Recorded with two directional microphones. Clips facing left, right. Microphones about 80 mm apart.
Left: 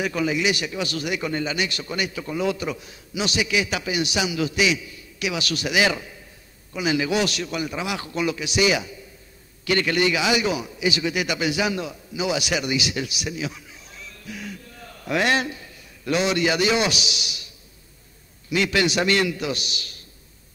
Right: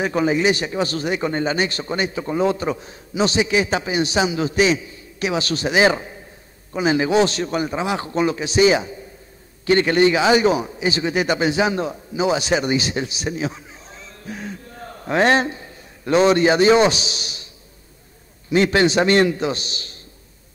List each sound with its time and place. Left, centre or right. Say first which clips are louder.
0.0 s a man's voice: right 5 dB; right
18.5 s speech: right 6 dB; right